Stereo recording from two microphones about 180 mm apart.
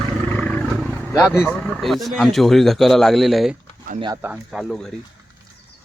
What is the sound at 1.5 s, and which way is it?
Speech, 5° left (ahead or behind).